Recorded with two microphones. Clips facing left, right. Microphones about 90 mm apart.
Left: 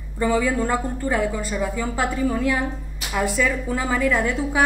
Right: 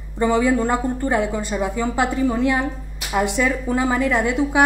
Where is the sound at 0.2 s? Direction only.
20° right (ahead or behind).